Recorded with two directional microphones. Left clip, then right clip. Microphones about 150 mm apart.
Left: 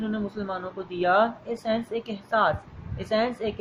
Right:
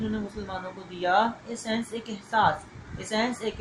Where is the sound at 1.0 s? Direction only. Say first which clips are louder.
Left 2 dB; 50° left (ahead or behind).